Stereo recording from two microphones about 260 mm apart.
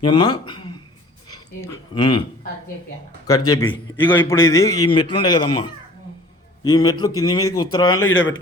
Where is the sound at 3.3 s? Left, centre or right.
Centre.